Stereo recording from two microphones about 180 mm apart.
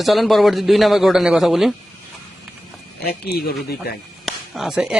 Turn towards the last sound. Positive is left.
turn(degrees=-5)  # may be behind; listen again after turning